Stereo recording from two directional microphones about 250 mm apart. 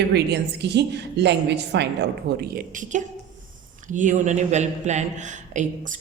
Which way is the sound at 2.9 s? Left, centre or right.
Right.